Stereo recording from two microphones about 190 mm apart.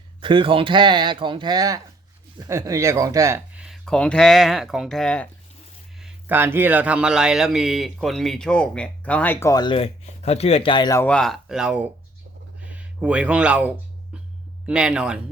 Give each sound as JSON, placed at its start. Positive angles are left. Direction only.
{"t": 0.2, "sound": "speech", "side_deg": -25}
{"t": 6.0, "sound": "speech", "side_deg": -5}
{"t": 11.0, "sound": "speech", "side_deg": 5}
{"t": 12.7, "sound": "a sound", "side_deg": -5}
{"t": 14.7, "sound": "speech", "side_deg": -5}